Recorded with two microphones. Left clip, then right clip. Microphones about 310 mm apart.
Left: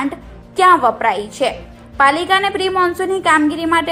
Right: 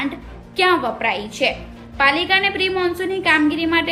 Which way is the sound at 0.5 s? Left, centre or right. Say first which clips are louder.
Left 6 dB; centre.